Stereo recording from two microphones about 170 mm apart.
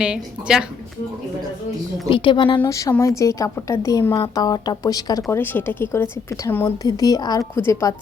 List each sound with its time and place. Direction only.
0.0 s a woman's voice: 5° right (ahead or behind)
2.0 s a woman's voice: 30° left (ahead or behind)
2.6 s a woman's voice: 20° left (ahead or behind)
5.3 s a woman's voice: 10° left (ahead or behind)